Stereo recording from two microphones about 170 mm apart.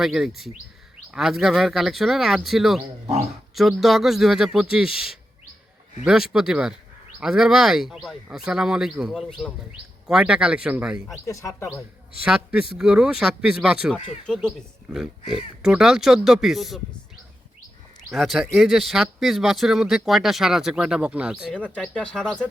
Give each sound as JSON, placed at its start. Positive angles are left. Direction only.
{"t": 0.0, "sound": "speech", "side_deg": 0}
{"t": 11.3, "sound": "speech", "side_deg": 20}
{"t": 12.2, "sound": "speech", "side_deg": -5}
{"t": 18.1, "sound": "speech", "side_deg": 0}
{"t": 21.5, "sound": "speech", "side_deg": 5}